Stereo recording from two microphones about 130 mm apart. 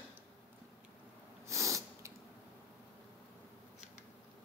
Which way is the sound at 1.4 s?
25° right (ahead or behind).